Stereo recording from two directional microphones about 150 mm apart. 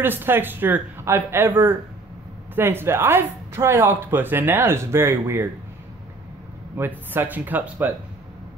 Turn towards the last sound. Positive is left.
turn(degrees=-10)  # may be behind; listen again after turning